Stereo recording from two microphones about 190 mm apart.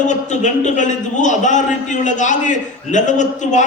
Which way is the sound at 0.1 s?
40° left (ahead or behind).